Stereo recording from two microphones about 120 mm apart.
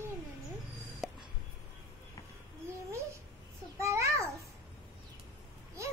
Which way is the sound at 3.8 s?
25° right (ahead or behind).